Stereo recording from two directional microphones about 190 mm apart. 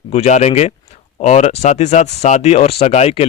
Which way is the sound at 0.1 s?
35° left (ahead or behind).